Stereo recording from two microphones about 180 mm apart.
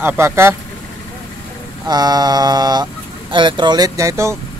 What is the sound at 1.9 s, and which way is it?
Speech, 20° right (ahead or behind).